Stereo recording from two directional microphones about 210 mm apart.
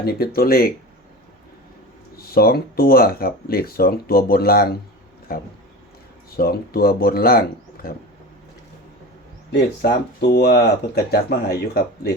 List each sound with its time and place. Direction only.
0.0 s speech: 45° left (ahead or behind)
2.1 s speech: 45° left (ahead or behind)
6.3 s speech: 45° left (ahead or behind)
9.5 s speech: 50° left (ahead or behind)